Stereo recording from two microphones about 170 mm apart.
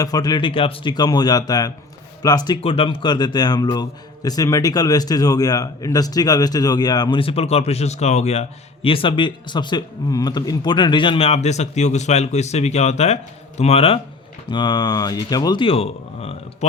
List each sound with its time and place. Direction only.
0.0 s speech: 20° left (ahead or behind)